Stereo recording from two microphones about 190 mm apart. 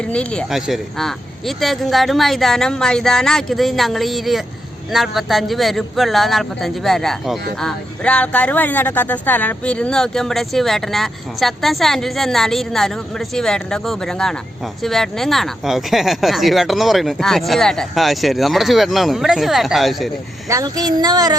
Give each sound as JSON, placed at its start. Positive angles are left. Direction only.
{"t": 0.0, "sound": "speech", "side_deg": 5}
{"t": 20.5, "sound": "child singing", "side_deg": -20}